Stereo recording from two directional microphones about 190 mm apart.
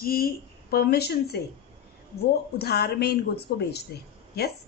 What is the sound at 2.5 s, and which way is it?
A woman's voice, 60° left (ahead or behind).